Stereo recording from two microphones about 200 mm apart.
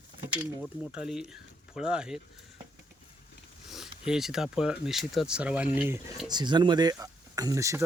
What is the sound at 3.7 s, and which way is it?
Speech, centre (ahead or behind).